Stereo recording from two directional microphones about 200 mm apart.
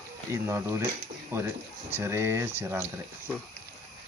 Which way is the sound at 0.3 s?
15° right (ahead or behind).